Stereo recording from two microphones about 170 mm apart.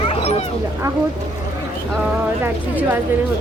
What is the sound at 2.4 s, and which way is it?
Speech, 10° right (ahead or behind).